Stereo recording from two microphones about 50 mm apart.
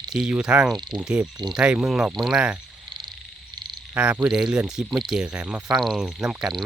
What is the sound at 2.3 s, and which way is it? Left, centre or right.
Speech, right.